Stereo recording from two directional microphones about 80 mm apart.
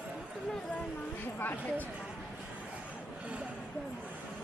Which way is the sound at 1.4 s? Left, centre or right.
Left.